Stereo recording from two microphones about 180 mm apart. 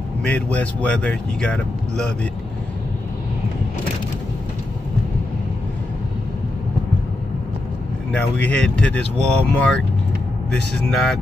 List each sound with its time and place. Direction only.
0.2 s speech: 5° left (ahead or behind)
8.1 s speech: 5° left (ahead or behind)